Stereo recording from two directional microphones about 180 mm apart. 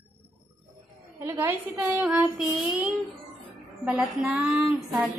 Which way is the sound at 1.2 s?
15° right (ahead or behind).